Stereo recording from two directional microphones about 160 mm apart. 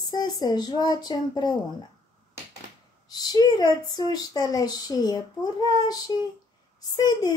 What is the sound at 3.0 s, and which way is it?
Child singing, 25° left (ahead or behind).